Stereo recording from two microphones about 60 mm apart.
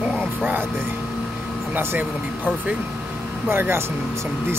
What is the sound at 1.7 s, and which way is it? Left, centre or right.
Speech, right.